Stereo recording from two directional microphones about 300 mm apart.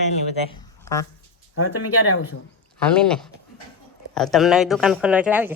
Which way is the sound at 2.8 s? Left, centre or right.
Centre.